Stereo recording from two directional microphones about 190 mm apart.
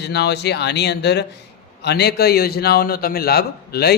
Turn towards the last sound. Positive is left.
turn(degrees=55)  # may be behind; listen again after turning